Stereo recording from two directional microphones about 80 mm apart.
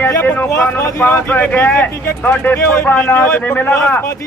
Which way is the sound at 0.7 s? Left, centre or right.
Left.